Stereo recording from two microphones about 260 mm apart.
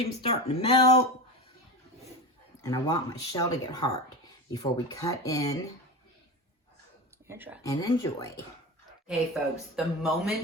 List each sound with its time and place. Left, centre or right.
0.0 s speech: left
2.6 s speech: centre
7.3 s speech: centre
7.6 s speech: centre
9.0 s speech: centre